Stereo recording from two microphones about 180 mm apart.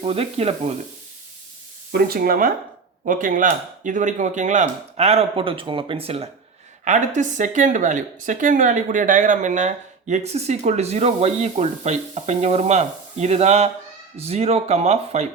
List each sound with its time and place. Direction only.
0.0 s speech: 30° right (ahead or behind)
1.9 s speech: 55° right (ahead or behind); by 15.3 s 35° right (ahead or behind)